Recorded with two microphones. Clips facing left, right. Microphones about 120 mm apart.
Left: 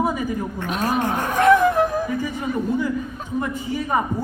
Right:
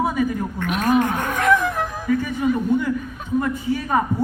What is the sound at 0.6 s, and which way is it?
Speech, 30° left (ahead or behind).